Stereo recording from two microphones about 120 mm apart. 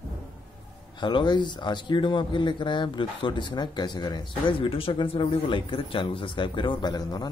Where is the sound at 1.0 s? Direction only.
40° left (ahead or behind).